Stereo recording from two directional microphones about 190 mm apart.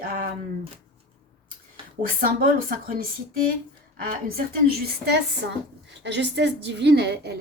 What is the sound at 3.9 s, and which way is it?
A woman's voice, 50° right (ahead or behind).